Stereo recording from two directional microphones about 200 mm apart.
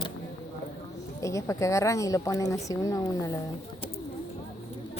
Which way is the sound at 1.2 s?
15° left (ahead or behind).